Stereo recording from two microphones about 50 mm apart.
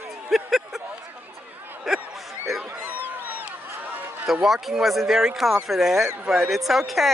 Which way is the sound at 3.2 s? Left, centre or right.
Right.